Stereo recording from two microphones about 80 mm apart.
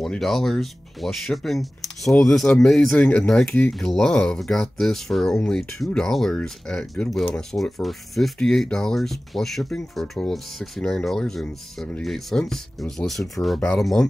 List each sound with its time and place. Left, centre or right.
0.0 s speech: centre
3.0 s speech: centre
3.8 s speech: centre
11.4 s speech: centre
12.0 s speech: centre
13.6 s speech: centre